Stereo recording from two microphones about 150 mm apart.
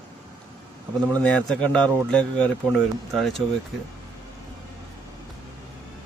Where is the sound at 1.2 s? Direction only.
5° left (ahead or behind).